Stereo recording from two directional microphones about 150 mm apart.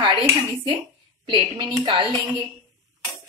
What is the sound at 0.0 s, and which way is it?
Speech, 30° right (ahead or behind).